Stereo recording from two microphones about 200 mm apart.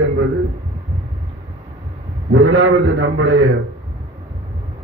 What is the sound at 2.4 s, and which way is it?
A man's voice, 65° right (ahead or behind).